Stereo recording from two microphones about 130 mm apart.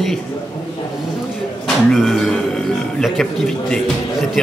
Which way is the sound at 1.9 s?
Centre (ahead or behind).